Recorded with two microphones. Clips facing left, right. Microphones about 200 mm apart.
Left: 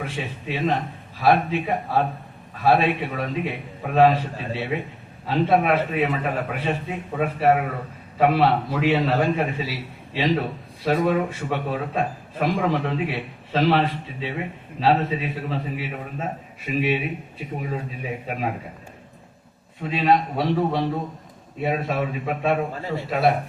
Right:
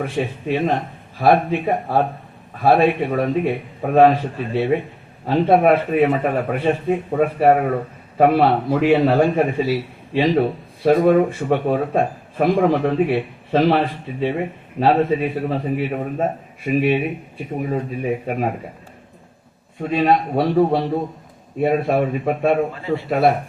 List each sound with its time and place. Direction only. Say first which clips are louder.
0.0 s speech: right 7 dB; 50° right (ahead or behind)
5.2 s speech: right 5 dB; 50° right (ahead or behind)
19.9 s speech: right 3 dB; 50° right (ahead or behind)